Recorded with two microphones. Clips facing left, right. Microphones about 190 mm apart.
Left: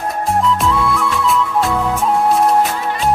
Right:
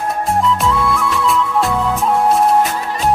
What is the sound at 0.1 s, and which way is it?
Music, centre (ahead or behind).